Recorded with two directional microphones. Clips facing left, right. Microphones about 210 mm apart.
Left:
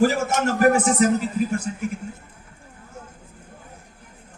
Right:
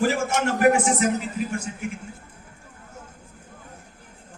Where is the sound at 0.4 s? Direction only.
40° left (ahead or behind).